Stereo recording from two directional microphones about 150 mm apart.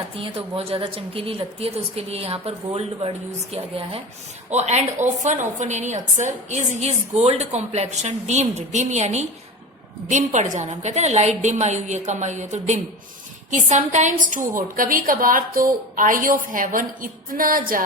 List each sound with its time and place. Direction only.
0.2 s a woman's voice: 40° right (ahead or behind); by 17.8 s 70° right (ahead or behind)